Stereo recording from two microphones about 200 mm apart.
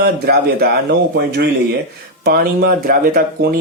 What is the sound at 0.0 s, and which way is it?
A man's voice, 50° right (ahead or behind).